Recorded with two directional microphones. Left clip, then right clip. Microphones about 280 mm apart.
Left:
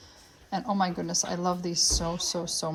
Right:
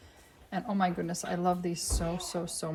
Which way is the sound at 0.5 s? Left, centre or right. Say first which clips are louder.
Left 3 dB; centre.